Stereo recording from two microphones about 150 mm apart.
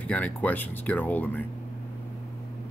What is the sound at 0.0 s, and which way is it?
Speech, 10° left (ahead or behind).